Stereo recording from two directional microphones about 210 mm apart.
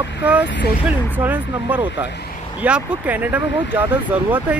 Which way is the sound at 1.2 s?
10° right (ahead or behind).